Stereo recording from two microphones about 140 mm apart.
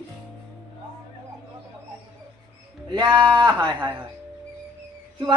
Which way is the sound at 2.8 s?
30° right (ahead or behind).